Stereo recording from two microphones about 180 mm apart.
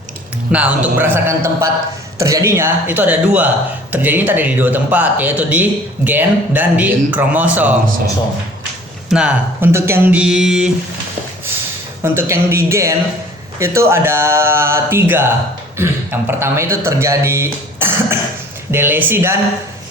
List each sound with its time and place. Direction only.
0.5 s speech: 5° right (ahead or behind)
9.0 s speech: 5° right (ahead or behind)
12.0 s speech: 15° right (ahead or behind)